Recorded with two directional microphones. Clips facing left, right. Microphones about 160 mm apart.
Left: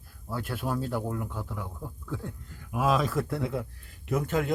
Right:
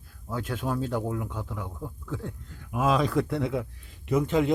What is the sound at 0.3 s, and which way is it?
Speech, 10° left (ahead or behind).